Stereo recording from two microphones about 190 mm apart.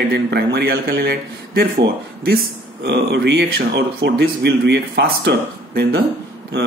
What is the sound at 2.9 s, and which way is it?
Speech, 60° right (ahead or behind).